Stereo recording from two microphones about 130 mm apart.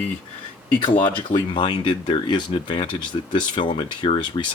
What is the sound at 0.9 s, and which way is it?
Speech, 40° left (ahead or behind).